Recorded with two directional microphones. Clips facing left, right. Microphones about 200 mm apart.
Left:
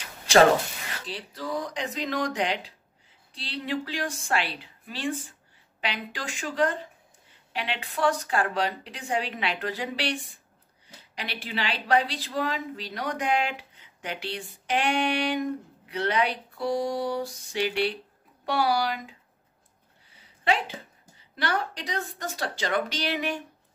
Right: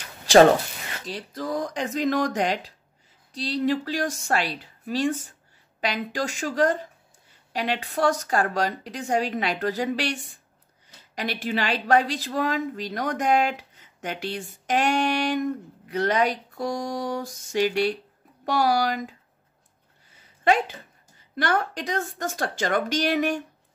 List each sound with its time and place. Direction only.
1.0 s a woman's voice: 45° right (ahead or behind)
20.1 s a sound: 45° right (ahead or behind)
21.2 s a woman's voice: 45° right (ahead or behind)